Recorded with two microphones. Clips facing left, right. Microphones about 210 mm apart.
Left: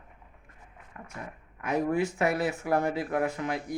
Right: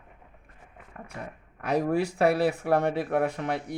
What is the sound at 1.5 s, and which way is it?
Speech, 35° right (ahead or behind).